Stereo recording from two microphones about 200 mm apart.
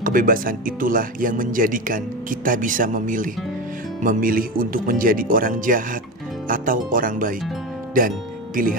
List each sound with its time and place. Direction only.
0.0 s speech: 45° right (ahead or behind)